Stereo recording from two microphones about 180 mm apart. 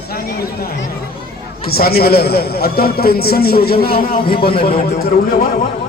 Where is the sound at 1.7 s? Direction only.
60° left (ahead or behind).